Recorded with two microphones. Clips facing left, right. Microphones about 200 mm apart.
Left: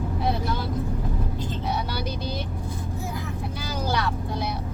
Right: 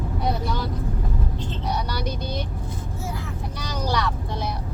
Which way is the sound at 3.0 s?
15° left (ahead or behind).